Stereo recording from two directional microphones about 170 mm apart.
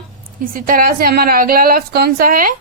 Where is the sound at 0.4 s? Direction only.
55° right (ahead or behind).